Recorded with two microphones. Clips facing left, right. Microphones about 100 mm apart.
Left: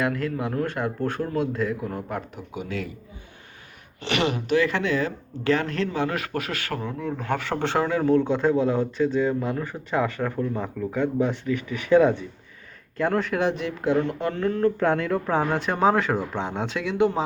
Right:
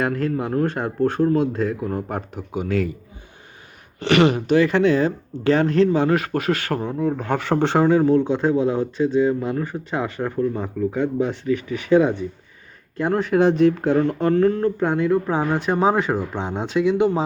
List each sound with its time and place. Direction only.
0.0 s speech: 35° right (ahead or behind)
4.0 s speech: 60° right (ahead or behind)
4.4 s a man's voice: 30° right (ahead or behind)
13.3 s speech: 30° right (ahead or behind)
14.8 s a man's voice: 15° right (ahead or behind)